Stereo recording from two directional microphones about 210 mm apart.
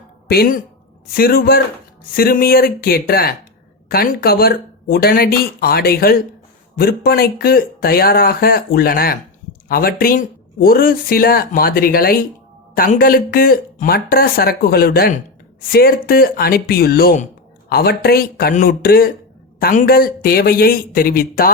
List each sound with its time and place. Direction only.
0.3 s speech: 45° left (ahead or behind)